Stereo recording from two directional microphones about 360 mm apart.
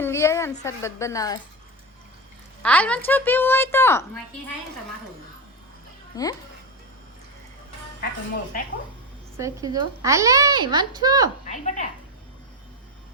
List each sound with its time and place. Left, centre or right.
0.0 s a sound: centre
0.6 s a woman's voice: centre
2.6 s a woman's voice: centre
6.1 s a woman's voice: centre
9.4 s a child's voice: centre
11.4 s speech: centre